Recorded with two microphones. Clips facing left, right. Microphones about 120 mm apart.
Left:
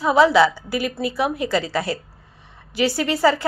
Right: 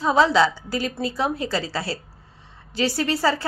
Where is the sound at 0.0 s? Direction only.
10° left (ahead or behind).